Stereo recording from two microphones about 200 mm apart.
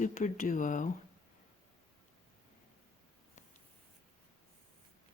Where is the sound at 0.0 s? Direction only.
40° left (ahead or behind).